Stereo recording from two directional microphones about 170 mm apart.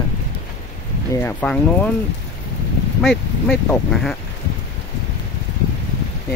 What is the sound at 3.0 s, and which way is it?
Speech, 5° left (ahead or behind).